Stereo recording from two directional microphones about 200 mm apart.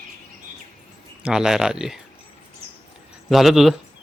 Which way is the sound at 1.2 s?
5° right (ahead or behind).